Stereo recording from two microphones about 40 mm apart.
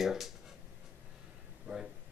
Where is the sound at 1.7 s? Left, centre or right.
Right.